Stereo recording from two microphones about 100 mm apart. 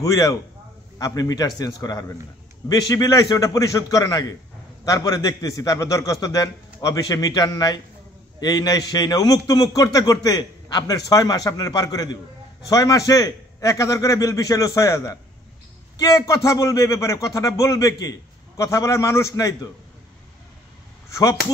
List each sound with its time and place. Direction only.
0.0 s a man's voice: 35° left (ahead or behind)
21.1 s speech: 35° left (ahead or behind)